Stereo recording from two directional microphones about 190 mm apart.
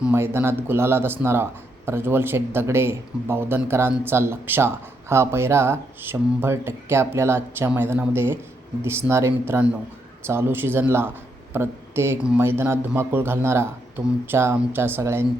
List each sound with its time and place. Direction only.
0.0 s speech: 10° right (ahead or behind)